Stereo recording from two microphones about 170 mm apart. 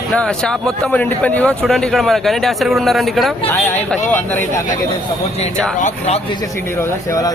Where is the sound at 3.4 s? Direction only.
10° left (ahead or behind).